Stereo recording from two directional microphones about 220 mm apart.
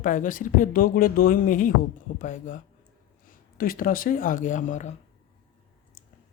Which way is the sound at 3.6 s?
40° left (ahead or behind).